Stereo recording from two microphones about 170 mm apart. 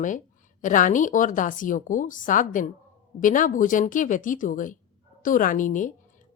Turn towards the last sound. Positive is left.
turn(degrees=50)  # may be behind; listen again after turning